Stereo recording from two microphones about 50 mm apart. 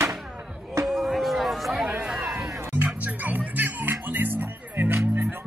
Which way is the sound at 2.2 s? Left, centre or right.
Right.